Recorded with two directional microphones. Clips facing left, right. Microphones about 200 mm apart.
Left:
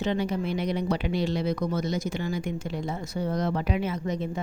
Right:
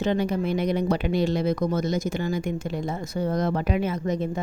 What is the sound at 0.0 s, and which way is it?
Speech, 45° right (ahead or behind).